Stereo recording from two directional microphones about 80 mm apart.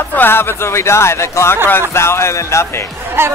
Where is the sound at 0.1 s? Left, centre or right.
Left.